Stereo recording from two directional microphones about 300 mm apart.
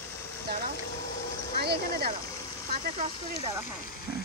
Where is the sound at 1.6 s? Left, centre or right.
Right.